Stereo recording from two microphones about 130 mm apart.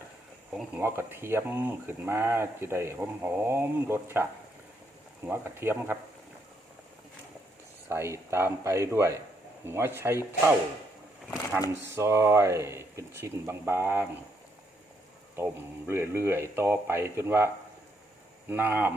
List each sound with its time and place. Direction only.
0.5 s speech: 5° right (ahead or behind)
0.8 s speech: 20° right (ahead or behind)
7.9 s speech: 20° right (ahead or behind)
11.7 s speech: 20° right (ahead or behind)
15.4 s speech: 20° right (ahead or behind)